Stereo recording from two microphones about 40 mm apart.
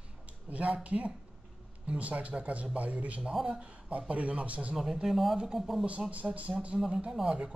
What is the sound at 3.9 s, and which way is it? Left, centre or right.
Speech, right.